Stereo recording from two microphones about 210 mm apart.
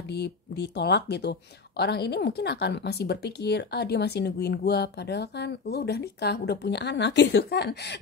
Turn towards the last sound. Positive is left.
turn(degrees=50)  # may be behind; listen again after turning